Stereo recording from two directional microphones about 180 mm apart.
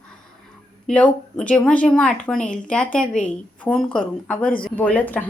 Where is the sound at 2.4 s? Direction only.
45° left (ahead or behind).